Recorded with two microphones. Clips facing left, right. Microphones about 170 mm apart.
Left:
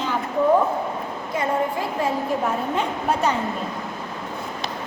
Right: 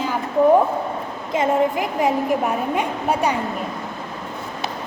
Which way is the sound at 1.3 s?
20° right (ahead or behind).